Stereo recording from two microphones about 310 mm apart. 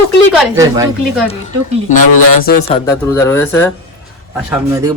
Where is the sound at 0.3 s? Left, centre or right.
Centre.